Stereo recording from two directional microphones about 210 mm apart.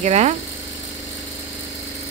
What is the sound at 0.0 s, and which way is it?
Speech, 30° right (ahead or behind).